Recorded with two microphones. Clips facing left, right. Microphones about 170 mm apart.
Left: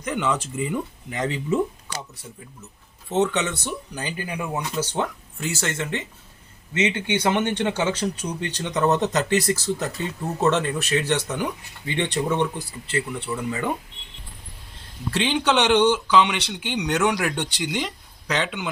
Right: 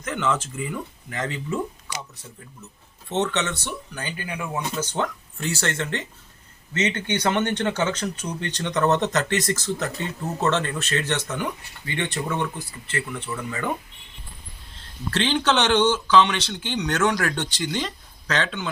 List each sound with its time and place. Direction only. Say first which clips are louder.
0.0 s speech: left 1 dB; 15° left (ahead or behind)
3.1 s speech: left 2 dB; 10° left (ahead or behind)
15.1 s speech: even; 10° left (ahead or behind)